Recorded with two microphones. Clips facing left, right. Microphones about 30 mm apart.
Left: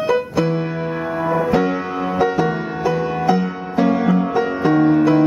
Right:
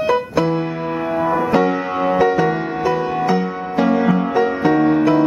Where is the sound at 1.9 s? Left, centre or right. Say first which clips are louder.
Right 4 dB; centre.